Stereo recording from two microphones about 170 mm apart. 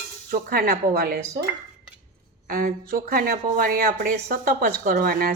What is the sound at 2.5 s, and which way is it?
Speech, 60° right (ahead or behind).